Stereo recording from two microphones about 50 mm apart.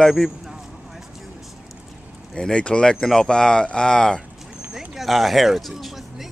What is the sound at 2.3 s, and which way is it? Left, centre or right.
Speech, centre.